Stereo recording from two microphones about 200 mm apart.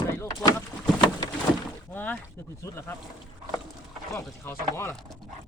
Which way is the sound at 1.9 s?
10° left (ahead or behind).